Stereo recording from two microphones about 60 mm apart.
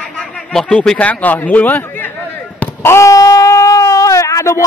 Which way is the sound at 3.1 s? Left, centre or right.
Left.